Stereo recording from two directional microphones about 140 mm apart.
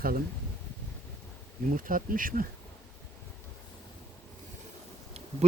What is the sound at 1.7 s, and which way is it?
Speech, 80° right.